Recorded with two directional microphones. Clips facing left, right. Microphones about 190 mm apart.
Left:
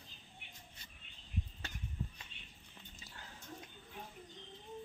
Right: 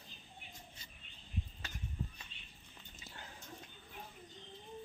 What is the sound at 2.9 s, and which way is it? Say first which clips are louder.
Dog: right 3 dB; 20° right (ahead or behind).